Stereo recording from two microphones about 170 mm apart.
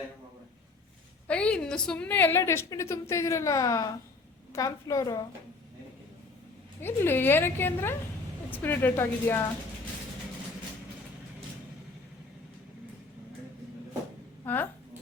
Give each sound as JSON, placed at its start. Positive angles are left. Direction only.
{"t": 1.3, "sound": "a woman's voice", "side_deg": 5}
{"t": 6.8, "sound": "a woman's voice", "side_deg": 15}
{"t": 14.4, "sound": "a woman's voice", "side_deg": 10}